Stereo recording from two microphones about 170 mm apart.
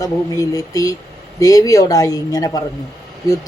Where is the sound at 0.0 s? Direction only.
20° left (ahead or behind).